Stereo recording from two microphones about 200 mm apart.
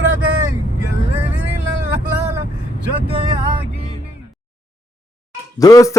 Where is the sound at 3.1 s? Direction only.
25° right (ahead or behind).